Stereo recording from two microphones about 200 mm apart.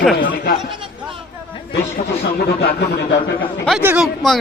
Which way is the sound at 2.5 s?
50° left (ahead or behind).